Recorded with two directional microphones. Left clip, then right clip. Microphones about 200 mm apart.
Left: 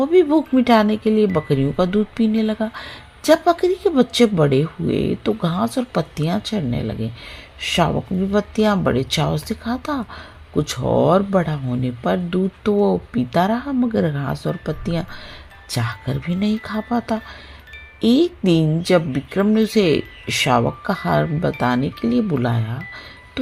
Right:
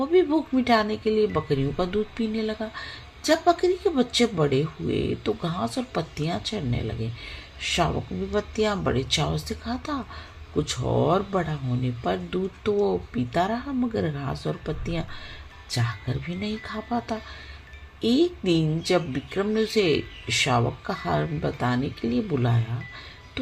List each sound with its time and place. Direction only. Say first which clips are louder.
0.0 s a woman's voice: left 6 dB; 40° left (ahead or behind)